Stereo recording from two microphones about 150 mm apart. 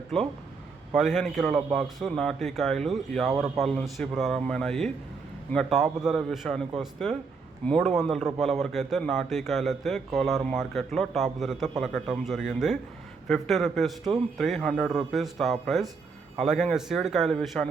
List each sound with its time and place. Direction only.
0.9 s a man's voice: 5° right (ahead or behind)